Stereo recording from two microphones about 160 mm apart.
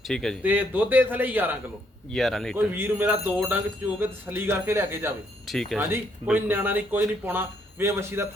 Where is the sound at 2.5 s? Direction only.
15° right (ahead or behind).